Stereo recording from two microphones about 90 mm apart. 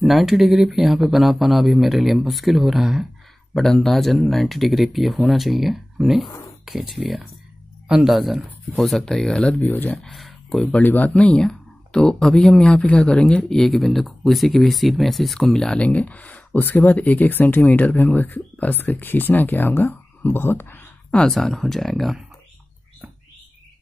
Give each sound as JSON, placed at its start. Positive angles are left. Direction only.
{"t": 0.0, "sound": "speech", "side_deg": 0}
{"t": 9.7, "sound": "speech", "side_deg": 20}
{"t": 10.0, "sound": "speech", "side_deg": 0}
{"t": 10.8, "sound": "speech", "side_deg": 20}
{"t": 21.1, "sound": "speech", "side_deg": 5}